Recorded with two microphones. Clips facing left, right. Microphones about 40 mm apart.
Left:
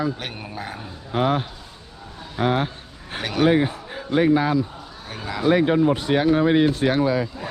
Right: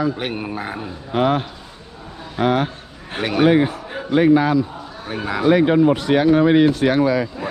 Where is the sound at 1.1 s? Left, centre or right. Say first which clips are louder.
Right 3 dB; right.